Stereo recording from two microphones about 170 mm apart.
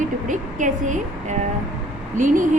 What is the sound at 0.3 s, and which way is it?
A woman's voice, 50° right (ahead or behind).